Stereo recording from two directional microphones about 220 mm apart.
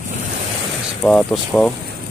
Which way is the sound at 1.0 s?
Centre (ahead or behind).